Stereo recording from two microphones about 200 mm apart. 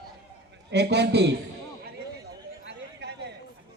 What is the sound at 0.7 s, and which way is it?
Speech, 55° right (ahead or behind).